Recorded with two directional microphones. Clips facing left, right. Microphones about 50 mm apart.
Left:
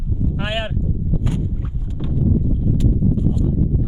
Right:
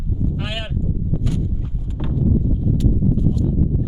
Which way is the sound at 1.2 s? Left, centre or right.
Left.